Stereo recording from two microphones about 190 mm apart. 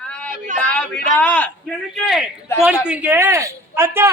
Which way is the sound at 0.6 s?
5° left (ahead or behind).